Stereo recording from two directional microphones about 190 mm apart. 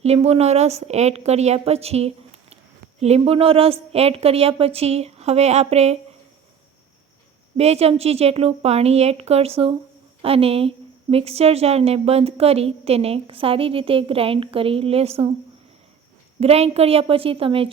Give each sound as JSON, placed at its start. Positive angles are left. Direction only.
{"t": 0.0, "sound": "a woman's voice", "side_deg": -35}
{"t": 7.5, "sound": "a woman's voice", "side_deg": -35}
{"t": 16.4, "sound": "a woman's voice", "side_deg": -35}